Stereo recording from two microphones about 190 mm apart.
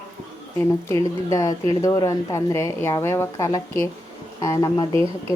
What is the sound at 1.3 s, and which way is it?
Speech, 15° left (ahead or behind).